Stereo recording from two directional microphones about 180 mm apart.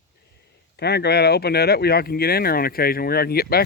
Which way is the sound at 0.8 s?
65° left (ahead or behind).